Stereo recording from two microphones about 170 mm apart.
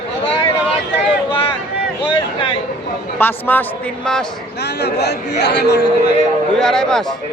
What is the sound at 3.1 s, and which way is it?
Speech, 10° left (ahead or behind).